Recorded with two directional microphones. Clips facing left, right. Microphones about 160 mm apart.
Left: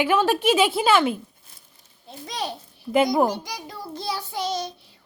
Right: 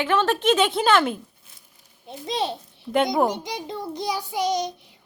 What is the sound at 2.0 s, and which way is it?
A child's voice, 25° right (ahead or behind).